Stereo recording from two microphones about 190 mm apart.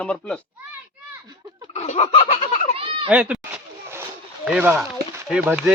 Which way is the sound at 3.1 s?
5° right (ahead or behind).